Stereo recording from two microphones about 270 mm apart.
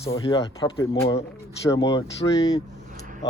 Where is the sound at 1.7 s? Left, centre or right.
Centre.